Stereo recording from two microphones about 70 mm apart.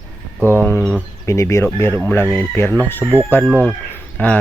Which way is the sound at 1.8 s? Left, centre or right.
Left.